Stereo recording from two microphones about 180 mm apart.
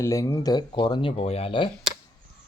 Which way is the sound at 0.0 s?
15° left (ahead or behind).